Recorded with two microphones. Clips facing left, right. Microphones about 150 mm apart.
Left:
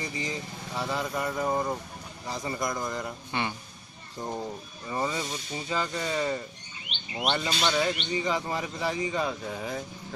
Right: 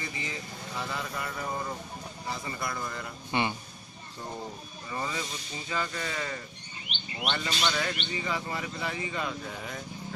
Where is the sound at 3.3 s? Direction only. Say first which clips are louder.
Right 4 dB; 10° right (ahead or behind).